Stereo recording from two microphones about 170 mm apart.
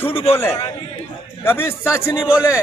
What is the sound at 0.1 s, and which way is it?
Speech, 35° left (ahead or behind).